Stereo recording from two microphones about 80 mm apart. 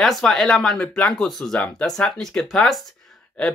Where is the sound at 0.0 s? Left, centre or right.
Centre.